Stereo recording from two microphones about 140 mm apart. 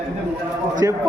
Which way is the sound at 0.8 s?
20° right (ahead or behind).